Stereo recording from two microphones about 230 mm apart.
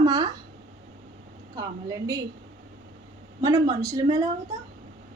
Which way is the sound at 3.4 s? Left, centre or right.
Centre.